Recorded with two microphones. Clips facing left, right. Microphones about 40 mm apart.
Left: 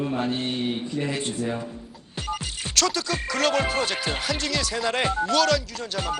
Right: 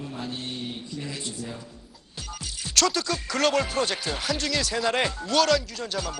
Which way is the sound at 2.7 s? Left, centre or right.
Centre.